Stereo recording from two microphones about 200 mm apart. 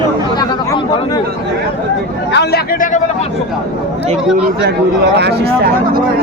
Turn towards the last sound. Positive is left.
turn(degrees=-55)  # may be behind; listen again after turning